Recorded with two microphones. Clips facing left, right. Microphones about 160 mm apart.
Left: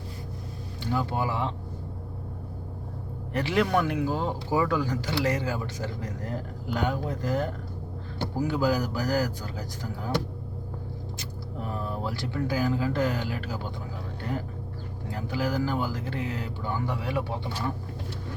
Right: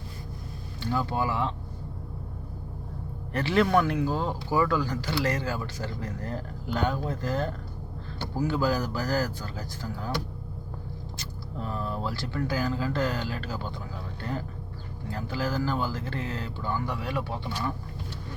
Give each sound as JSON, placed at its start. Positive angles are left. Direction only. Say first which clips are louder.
{"t": 0.8, "sound": "speech", "louder": "even", "side_deg": 15}
{"t": 3.3, "sound": "speech", "louder": "right 2 dB", "side_deg": 15}
{"t": 11.6, "sound": "speech", "louder": "even", "side_deg": 15}
{"t": 15.1, "sound": "speech", "louder": "left 1 dB", "side_deg": 15}